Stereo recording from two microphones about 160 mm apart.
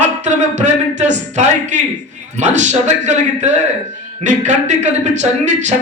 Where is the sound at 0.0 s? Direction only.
45° right (ahead or behind).